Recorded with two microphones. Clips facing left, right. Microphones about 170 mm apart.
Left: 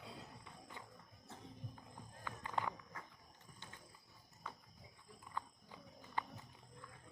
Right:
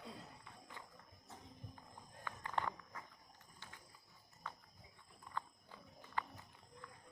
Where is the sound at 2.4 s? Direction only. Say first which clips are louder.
Even; 10° left (ahead or behind).